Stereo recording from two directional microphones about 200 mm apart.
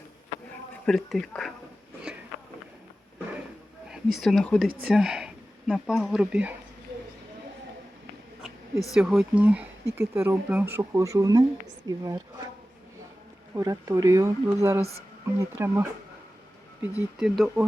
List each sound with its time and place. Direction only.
0.9 s speech: centre (ahead or behind)
3.9 s speech: centre (ahead or behind)
9.0 s speech: 5° right (ahead or behind)
13.6 s speech: 15° right (ahead or behind)